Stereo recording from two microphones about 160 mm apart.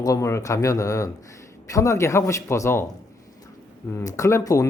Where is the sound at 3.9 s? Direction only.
20° left (ahead or behind).